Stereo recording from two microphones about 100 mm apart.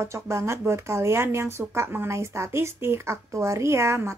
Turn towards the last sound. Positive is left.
turn(degrees=-30)  # may be behind; listen again after turning